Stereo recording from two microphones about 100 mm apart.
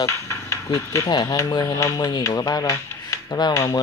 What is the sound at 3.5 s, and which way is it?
Hammer, 25° left (ahead or behind).